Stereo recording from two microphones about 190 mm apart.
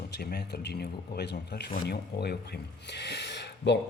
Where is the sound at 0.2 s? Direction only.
55° left (ahead or behind).